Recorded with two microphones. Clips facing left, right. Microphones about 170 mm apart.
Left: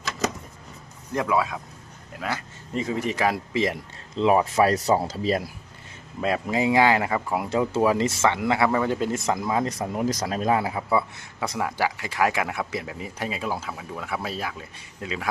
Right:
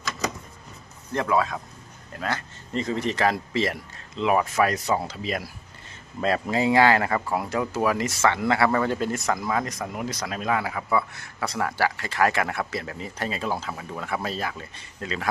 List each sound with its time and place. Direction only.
1.1 s speech: 10° left (ahead or behind)
4.1 s speech: 30° left (ahead or behind)
6.2 s speech: 15° left (ahead or behind)
7.5 s speech: 25° left (ahead or behind); by 15.3 s 5° left (ahead or behind)